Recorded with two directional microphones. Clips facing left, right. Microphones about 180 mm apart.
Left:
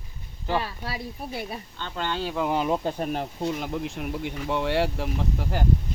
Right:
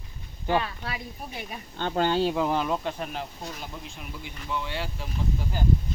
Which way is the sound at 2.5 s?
15° left (ahead or behind).